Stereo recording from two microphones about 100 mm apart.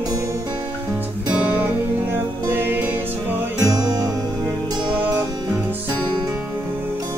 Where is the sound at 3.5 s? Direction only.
35° right (ahead or behind).